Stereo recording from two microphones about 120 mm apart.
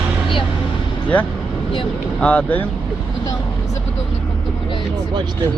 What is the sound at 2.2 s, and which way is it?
Speech, 10° left (ahead or behind).